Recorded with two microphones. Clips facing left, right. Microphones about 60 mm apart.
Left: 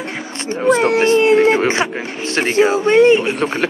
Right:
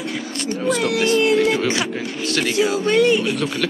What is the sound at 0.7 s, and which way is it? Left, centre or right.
Speech, left.